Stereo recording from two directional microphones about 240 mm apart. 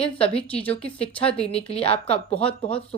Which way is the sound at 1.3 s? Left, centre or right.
Left.